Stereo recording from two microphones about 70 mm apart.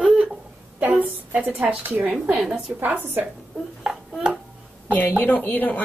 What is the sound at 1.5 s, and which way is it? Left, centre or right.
Speech, centre.